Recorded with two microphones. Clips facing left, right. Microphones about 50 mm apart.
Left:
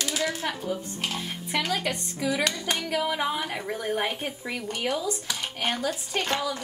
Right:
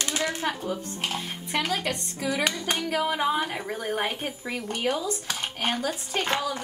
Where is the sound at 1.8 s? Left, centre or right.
Centre.